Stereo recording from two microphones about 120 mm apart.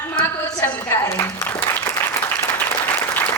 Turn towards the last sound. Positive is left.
turn(degrees=15)  # may be behind; listen again after turning